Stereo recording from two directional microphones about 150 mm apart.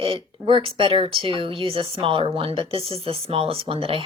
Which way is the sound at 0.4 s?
40° right (ahead or behind).